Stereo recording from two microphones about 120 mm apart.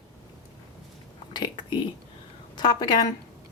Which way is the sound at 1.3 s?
40° left (ahead or behind).